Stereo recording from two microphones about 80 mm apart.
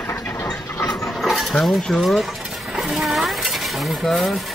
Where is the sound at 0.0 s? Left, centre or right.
Left.